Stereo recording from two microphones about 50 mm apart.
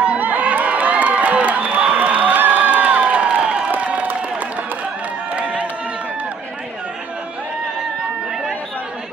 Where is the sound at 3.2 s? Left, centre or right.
Centre.